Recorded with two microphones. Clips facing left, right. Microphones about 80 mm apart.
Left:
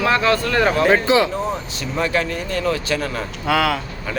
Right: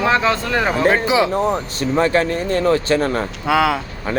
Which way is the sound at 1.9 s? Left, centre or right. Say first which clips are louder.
Right 5 dB; right.